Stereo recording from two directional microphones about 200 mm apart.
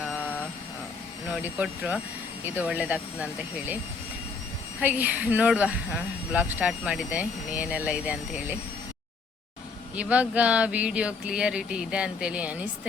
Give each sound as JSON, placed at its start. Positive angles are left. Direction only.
{"t": 0.0, "sound": "vehicle", "side_deg": 5}
{"t": 1.3, "sound": "speech", "side_deg": -5}
{"t": 4.8, "sound": "speech", "side_deg": -10}
{"t": 9.9, "sound": "speech", "side_deg": -5}